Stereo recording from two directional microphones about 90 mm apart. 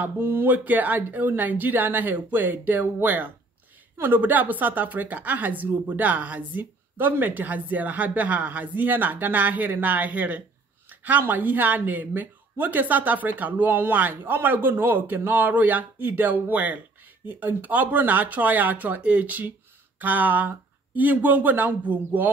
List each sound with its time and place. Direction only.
0.0 s a woman's voice: 25° right (ahead or behind)